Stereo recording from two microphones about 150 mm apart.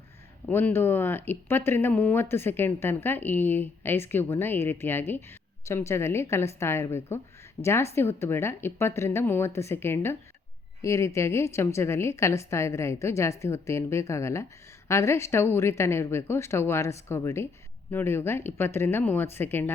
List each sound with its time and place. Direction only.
0.4 s a woman's voice: 10° left (ahead or behind)